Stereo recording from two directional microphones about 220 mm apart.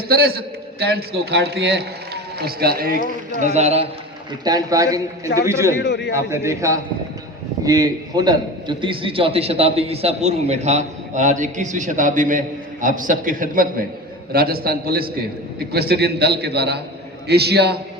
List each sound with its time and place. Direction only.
0.1 s a man's voice: 45° right (ahead or behind)
3.4 s a man's voice: 30° right (ahead or behind)
4.4 s a man's voice: 15° right (ahead or behind); by 17.7 s 50° right (ahead or behind)